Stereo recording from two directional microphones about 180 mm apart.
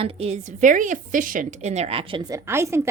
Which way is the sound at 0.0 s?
35° right (ahead or behind).